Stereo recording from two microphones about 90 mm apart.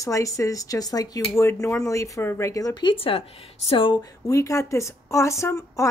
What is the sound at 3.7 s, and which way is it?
Speech, 75° left (ahead or behind).